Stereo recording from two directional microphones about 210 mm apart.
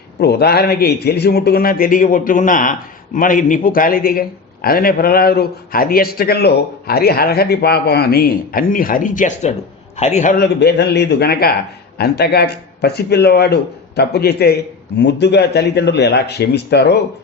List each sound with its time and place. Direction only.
0.2 s a man's voice: 50° left (ahead or behind); by 10.3 s 35° left (ahead or behind)
10.3 s a man's voice: 50° left (ahead or behind)